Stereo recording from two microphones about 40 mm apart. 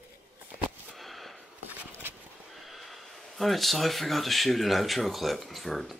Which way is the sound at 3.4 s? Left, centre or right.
Centre.